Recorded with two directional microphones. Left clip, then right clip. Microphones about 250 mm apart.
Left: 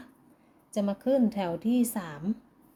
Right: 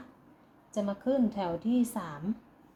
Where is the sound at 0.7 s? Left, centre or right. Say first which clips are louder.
Left 3 dB; centre.